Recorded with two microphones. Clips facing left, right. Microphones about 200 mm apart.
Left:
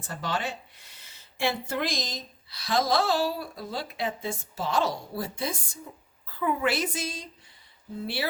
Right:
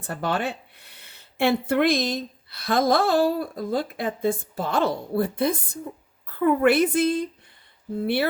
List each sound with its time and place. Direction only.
0.0 s speech: 60° right (ahead or behind)